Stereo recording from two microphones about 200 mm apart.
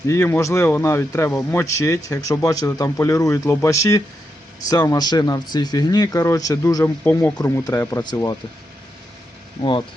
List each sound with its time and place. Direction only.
0.1 s speech: 15° left (ahead or behind)
9.6 s speech: 25° left (ahead or behind)